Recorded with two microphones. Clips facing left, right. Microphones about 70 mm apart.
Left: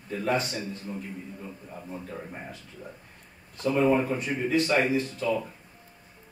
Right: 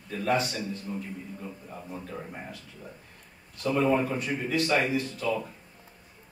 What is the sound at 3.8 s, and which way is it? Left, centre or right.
A man's voice, centre.